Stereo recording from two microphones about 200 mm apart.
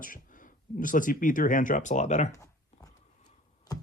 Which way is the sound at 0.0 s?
40° left (ahead or behind).